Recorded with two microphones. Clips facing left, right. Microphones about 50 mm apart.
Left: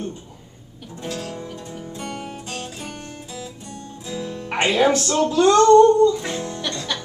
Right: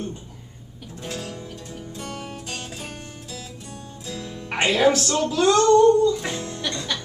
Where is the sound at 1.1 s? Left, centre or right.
Centre.